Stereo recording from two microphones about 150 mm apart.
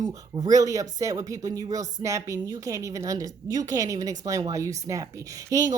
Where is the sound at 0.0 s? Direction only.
25° right (ahead or behind).